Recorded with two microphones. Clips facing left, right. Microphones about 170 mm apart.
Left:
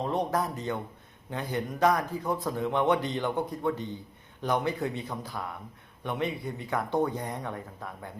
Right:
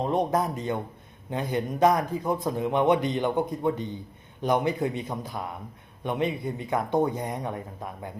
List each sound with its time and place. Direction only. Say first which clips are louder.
0.0 s a man's voice: right 4 dB; 20° right (ahead or behind)